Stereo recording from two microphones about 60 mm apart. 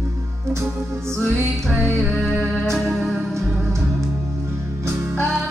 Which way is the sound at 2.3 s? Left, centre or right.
Centre.